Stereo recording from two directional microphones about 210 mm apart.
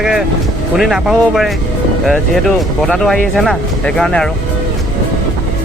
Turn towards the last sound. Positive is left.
turn(degrees=5)  # may be behind; listen again after turning